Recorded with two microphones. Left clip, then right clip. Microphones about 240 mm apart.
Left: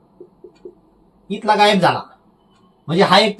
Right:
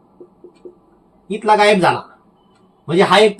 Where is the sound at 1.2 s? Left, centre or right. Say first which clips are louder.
Right 2 dB; centre.